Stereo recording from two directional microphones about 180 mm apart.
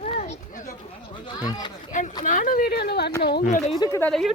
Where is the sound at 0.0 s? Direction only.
40° left (ahead or behind).